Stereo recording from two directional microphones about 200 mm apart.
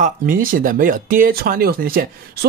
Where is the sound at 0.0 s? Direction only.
45° right (ahead or behind).